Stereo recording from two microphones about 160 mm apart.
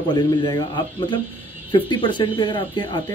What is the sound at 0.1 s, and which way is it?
A man's voice, 30° left (ahead or behind).